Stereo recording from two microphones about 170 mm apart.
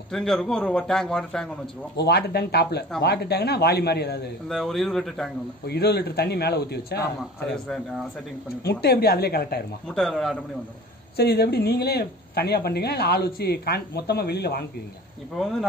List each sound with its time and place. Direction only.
0.1 s a man's voice: centre (ahead or behind)
2.0 s speech: 70° left (ahead or behind)
4.5 s a man's voice: centre (ahead or behind)
5.7 s speech: 70° left (ahead or behind)
7.4 s a man's voice: 5° left (ahead or behind)
8.6 s a woman's voice: 65° left (ahead or behind)
9.8 s a man's voice: 5° left (ahead or behind)
11.1 s speech: 70° left (ahead or behind)